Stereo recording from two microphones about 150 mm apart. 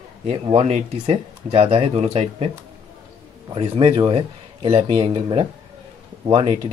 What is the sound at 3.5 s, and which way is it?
Speech, 35° right (ahead or behind).